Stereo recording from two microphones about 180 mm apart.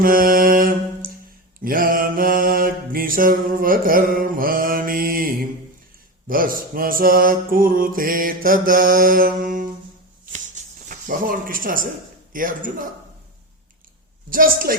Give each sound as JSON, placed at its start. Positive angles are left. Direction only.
{"t": 0.0, "sound": "mantra", "side_deg": -55}
{"t": 10.3, "sound": "a sound", "side_deg": -45}
{"t": 12.3, "sound": "mantra", "side_deg": -50}
{"t": 14.3, "sound": "mantra", "side_deg": -50}